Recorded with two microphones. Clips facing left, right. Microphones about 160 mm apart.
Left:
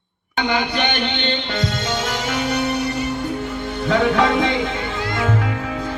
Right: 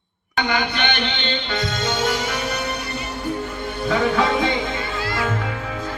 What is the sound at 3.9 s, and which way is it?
Music, 75° left (ahead or behind).